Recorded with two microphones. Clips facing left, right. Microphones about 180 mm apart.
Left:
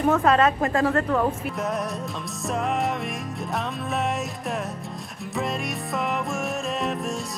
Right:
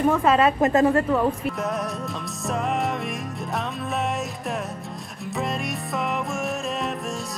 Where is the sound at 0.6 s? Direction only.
20° right (ahead or behind).